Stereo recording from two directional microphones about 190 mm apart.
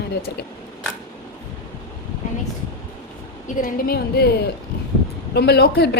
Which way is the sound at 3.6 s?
55° left (ahead or behind).